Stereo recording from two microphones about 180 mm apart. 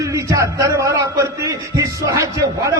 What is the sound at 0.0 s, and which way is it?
A man's voice, 20° right (ahead or behind).